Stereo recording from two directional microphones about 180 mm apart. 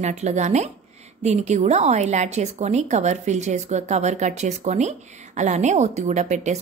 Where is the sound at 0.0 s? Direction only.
40° right (ahead or behind).